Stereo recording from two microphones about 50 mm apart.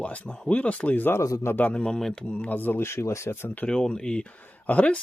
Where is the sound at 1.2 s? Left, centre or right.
Left.